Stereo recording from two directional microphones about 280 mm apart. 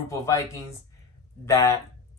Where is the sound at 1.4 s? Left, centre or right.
Centre.